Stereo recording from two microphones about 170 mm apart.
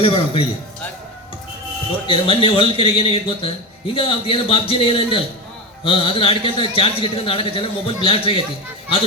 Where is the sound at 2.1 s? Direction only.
35° left (ahead or behind).